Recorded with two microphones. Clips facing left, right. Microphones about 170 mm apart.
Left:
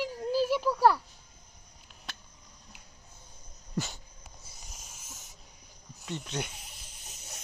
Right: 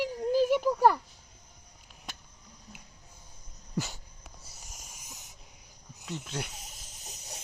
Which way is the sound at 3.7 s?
5° right (ahead or behind).